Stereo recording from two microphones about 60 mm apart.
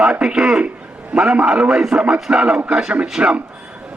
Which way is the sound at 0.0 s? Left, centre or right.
Centre.